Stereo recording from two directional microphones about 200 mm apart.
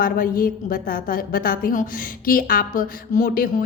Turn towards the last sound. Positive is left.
turn(degrees=45)  # may be behind; listen again after turning